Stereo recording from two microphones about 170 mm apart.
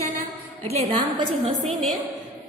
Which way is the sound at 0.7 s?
35° right (ahead or behind).